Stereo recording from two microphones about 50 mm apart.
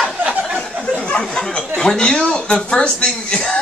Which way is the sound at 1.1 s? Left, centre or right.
Left.